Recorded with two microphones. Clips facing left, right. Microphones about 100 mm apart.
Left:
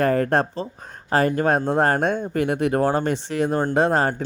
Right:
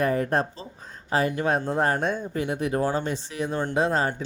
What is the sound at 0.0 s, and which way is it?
Speech, 65° left (ahead or behind).